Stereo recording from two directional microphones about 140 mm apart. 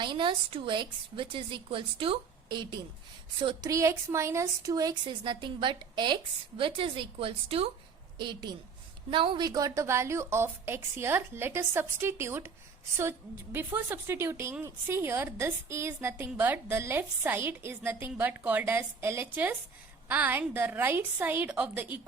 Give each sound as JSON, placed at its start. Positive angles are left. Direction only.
{"t": 0.0, "sound": "a woman's voice", "side_deg": -35}
{"t": 8.2, "sound": "a woman's voice", "side_deg": -30}